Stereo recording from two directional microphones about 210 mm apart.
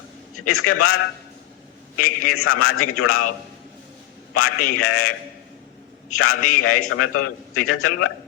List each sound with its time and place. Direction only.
0.4 s a man's voice: 90° left
2.0 s a man's voice: 90° left
4.4 s a man's voice: 90° left
6.1 s a man's voice: 90° left